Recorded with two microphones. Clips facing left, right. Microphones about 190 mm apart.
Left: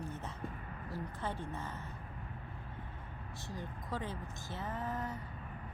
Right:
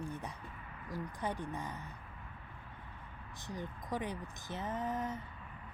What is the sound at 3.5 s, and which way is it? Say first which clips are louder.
Speech: right 2 dB; 15° right (ahead or behind).